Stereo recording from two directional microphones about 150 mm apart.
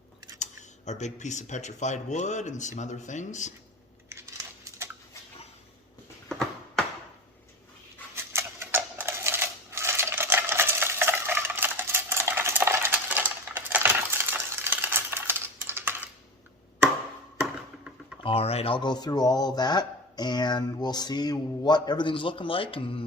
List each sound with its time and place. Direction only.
0.9 s speech: 50° left (ahead or behind)
4.1 s crumpling: 20° right (ahead or behind)
6.2 s a sound: 5° left (ahead or behind)
8.1 s typewriter: 15° right (ahead or behind)
17.4 s a sound: 5° right (ahead or behind)
18.2 s speech: 40° left (ahead or behind)